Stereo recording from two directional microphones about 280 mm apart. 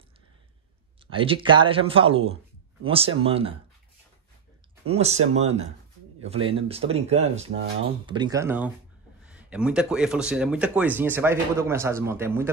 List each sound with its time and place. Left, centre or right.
1.1 s speech: centre
4.8 s speech: right